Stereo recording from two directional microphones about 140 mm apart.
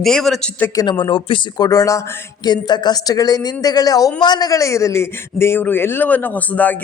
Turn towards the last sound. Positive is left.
turn(degrees=10)  # may be behind; listen again after turning